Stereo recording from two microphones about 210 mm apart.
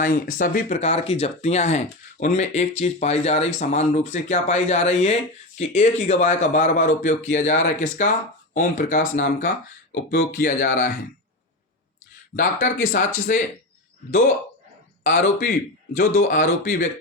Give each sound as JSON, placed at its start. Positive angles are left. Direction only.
{"t": 0.0, "sound": "speech", "side_deg": 40}
{"t": 12.4, "sound": "speech", "side_deg": 40}
{"t": 15.0, "sound": "speech", "side_deg": 40}